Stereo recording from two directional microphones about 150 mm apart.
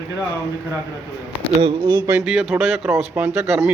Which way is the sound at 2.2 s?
5° right (ahead or behind).